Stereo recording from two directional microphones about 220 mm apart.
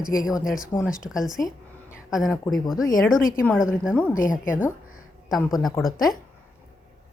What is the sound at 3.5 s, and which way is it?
Speech, 5° right (ahead or behind).